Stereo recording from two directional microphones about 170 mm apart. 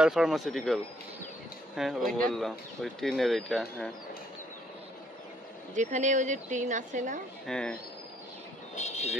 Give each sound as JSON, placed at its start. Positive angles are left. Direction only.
{"t": 0.0, "sound": "speech", "side_deg": -5}
{"t": 1.8, "sound": "speech", "side_deg": 0}
{"t": 5.8, "sound": "a woman's voice", "side_deg": -45}
{"t": 7.4, "sound": "speech", "side_deg": 5}
{"t": 8.7, "sound": "vehicle", "side_deg": 40}